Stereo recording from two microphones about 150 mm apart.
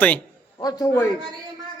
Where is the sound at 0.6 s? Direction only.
25° left (ahead or behind).